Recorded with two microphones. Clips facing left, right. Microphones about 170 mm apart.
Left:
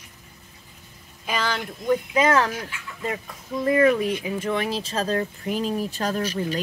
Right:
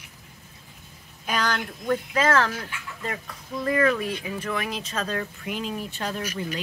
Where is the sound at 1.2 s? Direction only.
5° left (ahead or behind).